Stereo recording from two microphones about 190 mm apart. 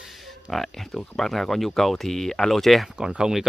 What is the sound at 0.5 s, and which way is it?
Speech, centre (ahead or behind).